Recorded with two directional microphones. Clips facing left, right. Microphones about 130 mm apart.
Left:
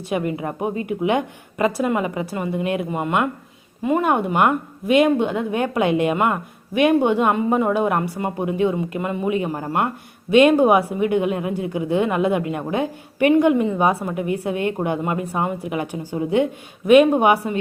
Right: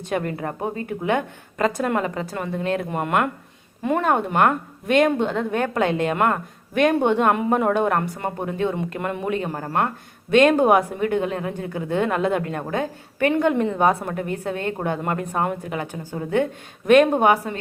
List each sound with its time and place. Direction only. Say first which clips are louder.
0.1 s a woman's voice: left 2 dB; 10° left (ahead or behind)